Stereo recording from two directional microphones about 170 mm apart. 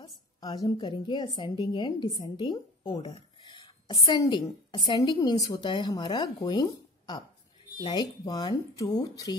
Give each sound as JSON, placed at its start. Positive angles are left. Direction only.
{"t": 0.0, "sound": "a woman's voice", "side_deg": 25}
{"t": 3.4, "sound": "a sound", "side_deg": 25}
{"t": 4.2, "sound": "a woman's voice", "side_deg": 25}